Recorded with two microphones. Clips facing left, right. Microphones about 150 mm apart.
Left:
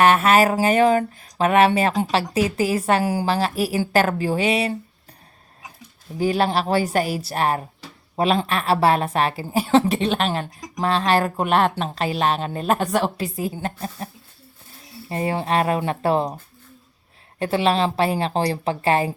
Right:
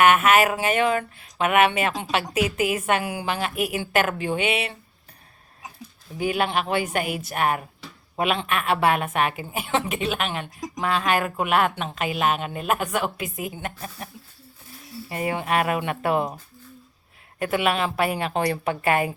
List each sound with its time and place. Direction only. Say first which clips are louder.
0.0 s a woman's voice: left 2 dB; 35° left (ahead or behind)
6.1 s a woman's voice: left 4 dB; 35° left (ahead or behind)
15.1 s a woman's voice: left 3 dB; 30° left (ahead or behind)
17.4 s a woman's voice: left 3 dB; 30° left (ahead or behind)